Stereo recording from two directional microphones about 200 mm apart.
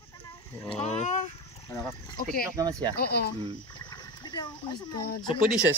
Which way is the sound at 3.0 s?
50° left (ahead or behind).